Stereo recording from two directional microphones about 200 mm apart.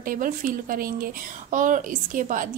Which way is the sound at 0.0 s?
45° right (ahead or behind).